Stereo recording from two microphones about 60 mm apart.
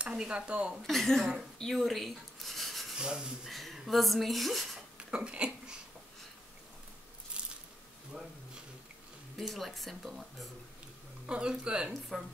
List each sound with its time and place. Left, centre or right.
0.0 s speech: centre
0.8 s speech: centre
1.6 s rub: centre
3.0 s speech: centre
3.4 s speech: centre
4.9 s a sound: centre
7.3 s squish: centre
9.5 s speech: centre
11.2 s speech: centre
12.1 s speech: centre